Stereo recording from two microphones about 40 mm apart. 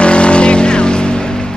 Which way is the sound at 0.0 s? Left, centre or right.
Left.